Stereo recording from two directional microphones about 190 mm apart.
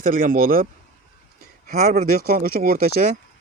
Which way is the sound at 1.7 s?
50° right (ahead or behind).